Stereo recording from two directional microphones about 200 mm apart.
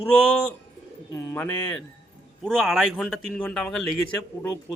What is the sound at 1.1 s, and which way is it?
Speech, 10° left (ahead or behind).